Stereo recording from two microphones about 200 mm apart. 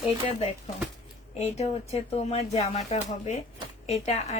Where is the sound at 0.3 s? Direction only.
30° left (ahead or behind).